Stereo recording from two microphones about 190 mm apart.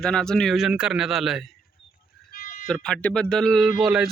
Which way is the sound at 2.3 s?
45° left (ahead or behind).